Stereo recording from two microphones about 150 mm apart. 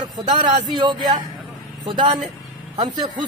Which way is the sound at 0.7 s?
30° right (ahead or behind).